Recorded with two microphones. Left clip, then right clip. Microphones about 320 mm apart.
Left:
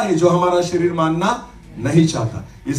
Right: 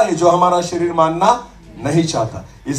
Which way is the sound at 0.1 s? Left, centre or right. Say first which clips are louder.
Right 3 dB; centre.